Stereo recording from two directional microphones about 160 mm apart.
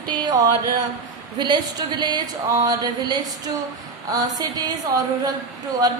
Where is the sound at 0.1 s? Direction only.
25° right (ahead or behind).